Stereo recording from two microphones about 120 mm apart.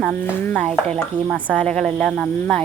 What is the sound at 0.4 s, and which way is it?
Speech, 10° left (ahead or behind).